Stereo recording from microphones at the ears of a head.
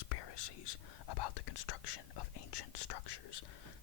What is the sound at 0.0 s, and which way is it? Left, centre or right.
Whispering, left.